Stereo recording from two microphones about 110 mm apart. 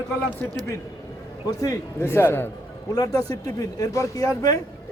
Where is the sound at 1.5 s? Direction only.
30° left (ahead or behind).